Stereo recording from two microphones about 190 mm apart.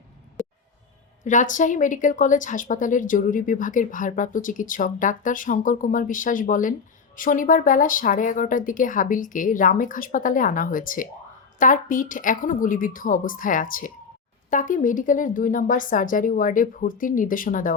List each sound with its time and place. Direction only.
1.2 s a woman's voice: 40° left (ahead or behind)